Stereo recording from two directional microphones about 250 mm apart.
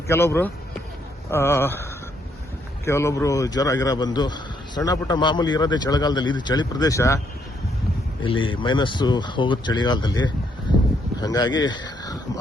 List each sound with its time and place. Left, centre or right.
0.1 s a man's voice: centre
8.2 s a man's voice: left
11.6 s a sound: centre